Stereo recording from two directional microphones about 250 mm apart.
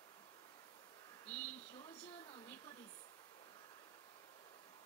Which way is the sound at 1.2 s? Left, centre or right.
Centre.